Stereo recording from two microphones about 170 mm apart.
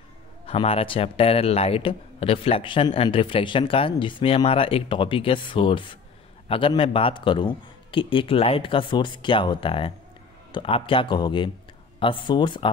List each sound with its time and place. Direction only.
0.5 s speech: 35° left (ahead or behind)